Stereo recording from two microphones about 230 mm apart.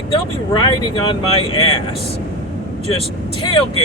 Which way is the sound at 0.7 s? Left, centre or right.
Left.